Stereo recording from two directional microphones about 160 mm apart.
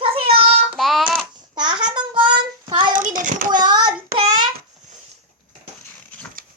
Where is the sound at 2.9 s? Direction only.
55° right (ahead or behind).